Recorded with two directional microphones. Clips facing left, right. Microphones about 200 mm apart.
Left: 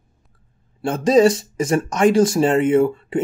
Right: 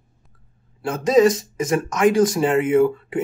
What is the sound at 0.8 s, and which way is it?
Speech, 30° left (ahead or behind).